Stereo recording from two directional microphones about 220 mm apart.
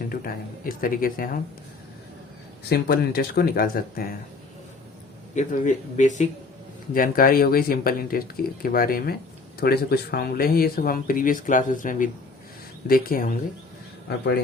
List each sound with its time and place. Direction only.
0.1 s speech: 40° left (ahead or behind)
2.6 s speech: 45° left (ahead or behind)
5.3 s speech: 35° left (ahead or behind)